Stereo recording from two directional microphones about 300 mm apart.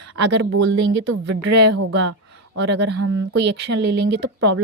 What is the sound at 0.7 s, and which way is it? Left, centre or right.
Speech, right.